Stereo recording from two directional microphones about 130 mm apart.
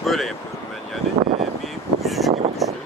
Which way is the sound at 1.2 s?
55° right (ahead or behind).